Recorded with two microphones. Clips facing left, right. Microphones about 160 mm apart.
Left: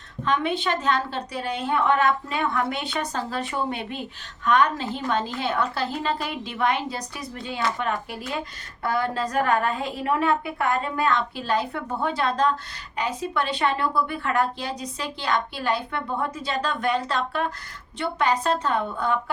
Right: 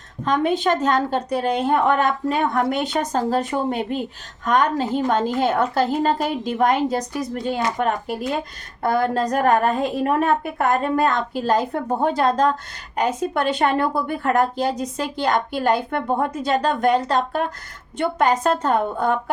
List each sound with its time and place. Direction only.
0.3 s speech: 45° right (ahead or behind)